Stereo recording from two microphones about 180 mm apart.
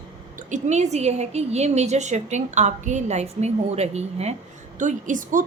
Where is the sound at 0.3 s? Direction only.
40° right (ahead or behind).